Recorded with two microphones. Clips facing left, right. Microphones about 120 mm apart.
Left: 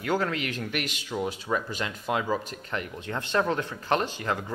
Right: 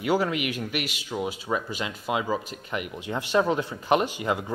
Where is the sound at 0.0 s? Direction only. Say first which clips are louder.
Right 3 dB; 15° right (ahead or behind).